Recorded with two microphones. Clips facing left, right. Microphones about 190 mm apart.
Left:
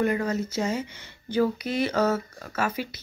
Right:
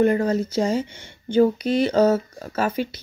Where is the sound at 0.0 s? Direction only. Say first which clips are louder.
Right 6 dB; 30° right (ahead or behind).